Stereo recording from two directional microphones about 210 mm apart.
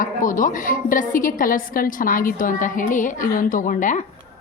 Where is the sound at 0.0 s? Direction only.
40° left (ahead or behind).